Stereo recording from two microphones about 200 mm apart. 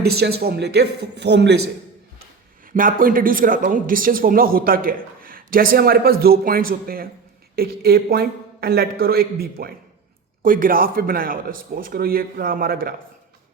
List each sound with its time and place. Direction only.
0.0 s speech: 55° right (ahead or behind)
2.7 s speech: 45° right (ahead or behind)